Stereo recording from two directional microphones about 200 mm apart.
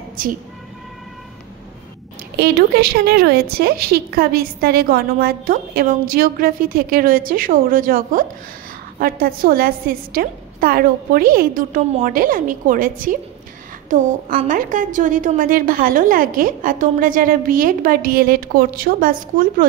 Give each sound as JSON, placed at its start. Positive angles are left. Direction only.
{"t": 0.2, "sound": "a woman's voice", "side_deg": -45}
{"t": 2.3, "sound": "a woman's voice", "side_deg": -55}